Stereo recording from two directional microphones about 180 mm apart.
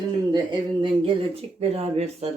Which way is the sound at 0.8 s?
30° right (ahead or behind).